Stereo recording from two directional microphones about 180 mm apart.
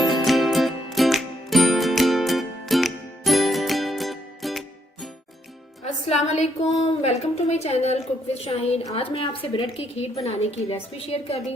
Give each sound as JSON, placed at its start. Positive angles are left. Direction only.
{"t": 0.0, "sound": "music", "side_deg": 0}
{"t": 5.8, "sound": "a woman's voice", "side_deg": 35}